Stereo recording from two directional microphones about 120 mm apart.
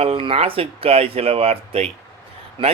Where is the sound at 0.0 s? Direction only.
50° right (ahead or behind).